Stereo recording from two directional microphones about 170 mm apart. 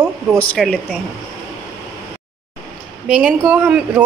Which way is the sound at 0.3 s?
5° left (ahead or behind).